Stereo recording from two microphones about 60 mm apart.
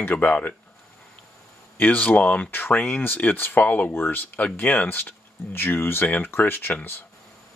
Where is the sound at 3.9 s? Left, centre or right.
Left.